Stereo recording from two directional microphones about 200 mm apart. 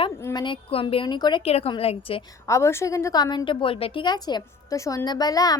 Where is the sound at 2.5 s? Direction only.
15° left (ahead or behind).